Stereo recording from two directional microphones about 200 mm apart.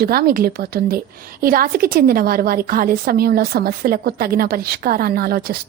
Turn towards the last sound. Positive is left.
turn(degrees=-50)  # may be behind; listen again after turning